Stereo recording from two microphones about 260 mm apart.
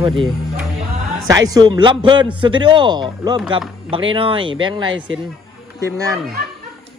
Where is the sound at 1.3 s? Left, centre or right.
Centre.